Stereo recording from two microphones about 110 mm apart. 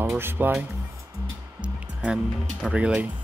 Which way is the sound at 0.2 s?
20° right (ahead or behind).